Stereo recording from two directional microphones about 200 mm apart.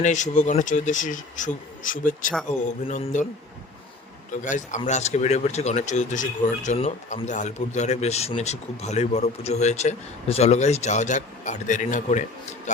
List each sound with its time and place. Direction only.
0.0 s speech: 35° left (ahead or behind)
4.4 s speech: 40° left (ahead or behind)